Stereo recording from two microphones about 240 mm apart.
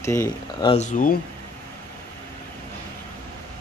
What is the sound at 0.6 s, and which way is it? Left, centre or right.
Speech, left.